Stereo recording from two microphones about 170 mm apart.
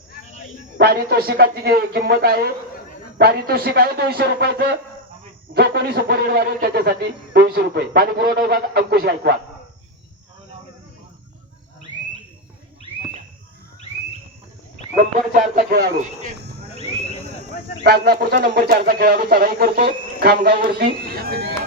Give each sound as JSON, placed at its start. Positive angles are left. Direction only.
{"t": 0.8, "sound": "speech", "side_deg": -65}
{"t": 15.3, "sound": "speech", "side_deg": -55}
{"t": 17.8, "sound": "speech", "side_deg": -70}
{"t": 18.5, "sound": "speech", "side_deg": -65}